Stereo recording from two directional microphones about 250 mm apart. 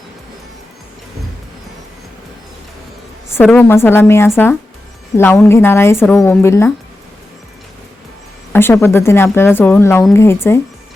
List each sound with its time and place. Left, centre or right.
3.2 s speech: centre
8.5 s speech: centre